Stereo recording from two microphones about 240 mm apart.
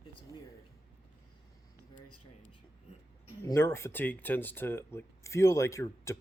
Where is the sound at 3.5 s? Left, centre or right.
Centre.